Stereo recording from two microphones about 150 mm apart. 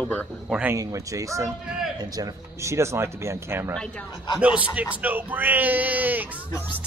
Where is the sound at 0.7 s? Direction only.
20° right (ahead or behind).